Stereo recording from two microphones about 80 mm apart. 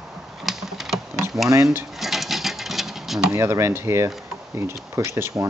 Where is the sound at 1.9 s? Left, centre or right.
Centre.